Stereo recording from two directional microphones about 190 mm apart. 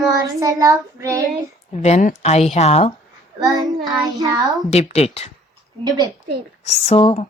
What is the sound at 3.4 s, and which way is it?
Child singing, 20° right (ahead or behind).